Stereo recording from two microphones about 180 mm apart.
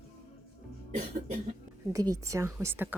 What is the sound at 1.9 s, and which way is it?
A woman's voice, 20° right (ahead or behind).